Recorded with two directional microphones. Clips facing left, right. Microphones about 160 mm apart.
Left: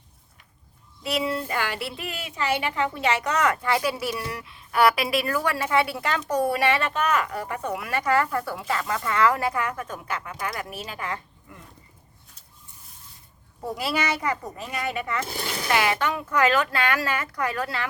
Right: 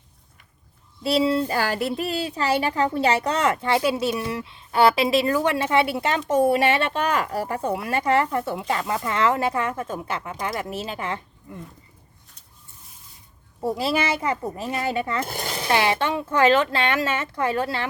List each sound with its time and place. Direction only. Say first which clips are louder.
1.0 s a woman's voice: right 6 dB; 30° right (ahead or behind)
13.6 s a woman's voice: right 4 dB; 25° right (ahead or behind)